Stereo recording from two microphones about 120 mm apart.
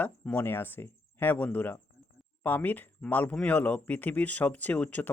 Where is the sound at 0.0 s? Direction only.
15° left (ahead or behind).